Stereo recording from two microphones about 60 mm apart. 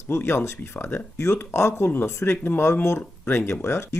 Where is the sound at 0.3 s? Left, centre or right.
Left.